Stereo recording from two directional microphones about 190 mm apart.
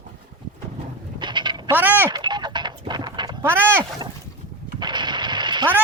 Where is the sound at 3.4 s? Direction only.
10° right (ahead or behind).